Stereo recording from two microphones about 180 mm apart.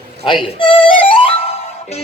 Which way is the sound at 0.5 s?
30° left (ahead or behind).